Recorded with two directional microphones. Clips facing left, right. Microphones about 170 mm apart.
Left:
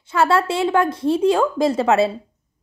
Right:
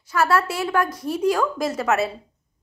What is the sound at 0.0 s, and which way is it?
Speech, 25° left (ahead or behind).